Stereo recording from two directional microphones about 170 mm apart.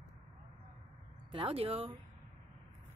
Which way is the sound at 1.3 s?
30° right (ahead or behind).